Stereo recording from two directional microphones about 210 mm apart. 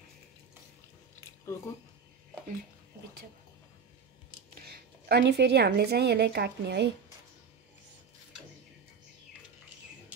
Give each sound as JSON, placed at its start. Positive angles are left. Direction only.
{"t": 4.6, "sound": "a woman's voice", "side_deg": -50}